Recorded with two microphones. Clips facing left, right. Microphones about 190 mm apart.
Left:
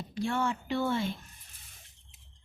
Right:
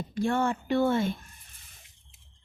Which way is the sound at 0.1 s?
50° right (ahead or behind).